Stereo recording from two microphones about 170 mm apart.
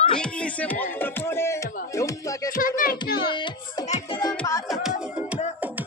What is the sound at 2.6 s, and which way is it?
Music, 55° left (ahead or behind).